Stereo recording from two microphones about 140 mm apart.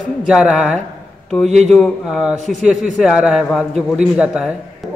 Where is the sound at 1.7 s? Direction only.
Centre (ahead or behind).